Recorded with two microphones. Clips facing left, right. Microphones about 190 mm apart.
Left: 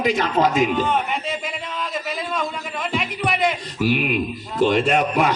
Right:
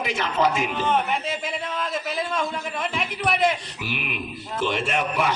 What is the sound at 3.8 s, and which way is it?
A man's voice, 40° left (ahead or behind).